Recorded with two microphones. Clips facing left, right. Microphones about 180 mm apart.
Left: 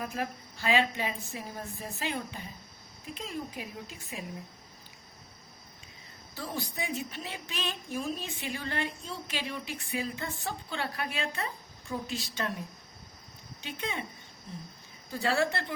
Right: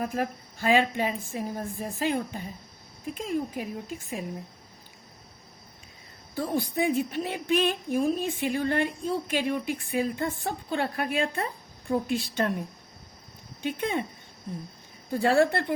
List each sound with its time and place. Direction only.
0.0 s a woman's voice: 45° right (ahead or behind)
6.3 s a woman's voice: 55° right (ahead or behind)
15.1 s a woman's voice: 55° right (ahead or behind)